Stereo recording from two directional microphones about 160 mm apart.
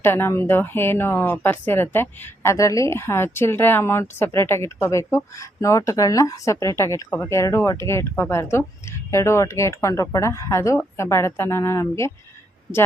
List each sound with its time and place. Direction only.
0.0 s speech: 15° left (ahead or behind)